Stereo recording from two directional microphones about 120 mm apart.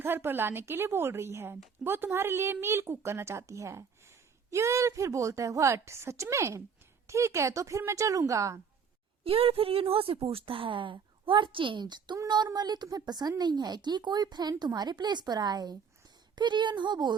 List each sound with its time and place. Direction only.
0.0 s speech: 20° right (ahead or behind)
9.2 s speech: 50° right (ahead or behind)